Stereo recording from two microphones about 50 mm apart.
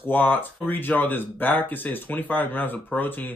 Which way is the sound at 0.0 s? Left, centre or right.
Left.